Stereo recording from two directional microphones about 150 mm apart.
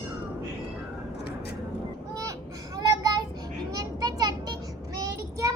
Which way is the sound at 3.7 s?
25° right (ahead or behind).